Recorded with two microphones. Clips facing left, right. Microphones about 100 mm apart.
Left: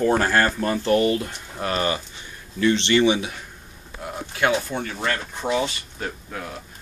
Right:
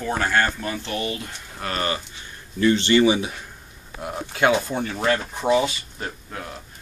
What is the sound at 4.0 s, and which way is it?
Speech, 20° right (ahead or behind).